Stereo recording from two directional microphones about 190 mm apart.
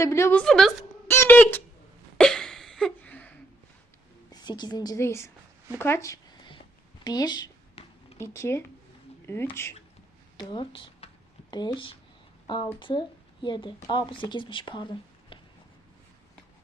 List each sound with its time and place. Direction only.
0.0 s a woman's voice: 15° left (ahead or behind)
1.0 s speech: 10° left (ahead or behind)
2.1 s a sound: 5° left (ahead or behind)
4.3 s a woman's voice: 20° left (ahead or behind)
5.7 s a sound: 15° left (ahead or behind)
7.0 s speech: 20° left (ahead or behind)
10.3 s speech: 25° left (ahead or behind)